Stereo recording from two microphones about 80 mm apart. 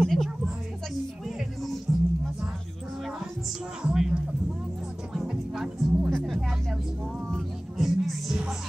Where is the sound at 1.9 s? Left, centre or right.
Right.